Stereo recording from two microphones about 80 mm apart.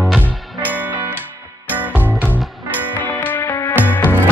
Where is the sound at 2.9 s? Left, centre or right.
Left.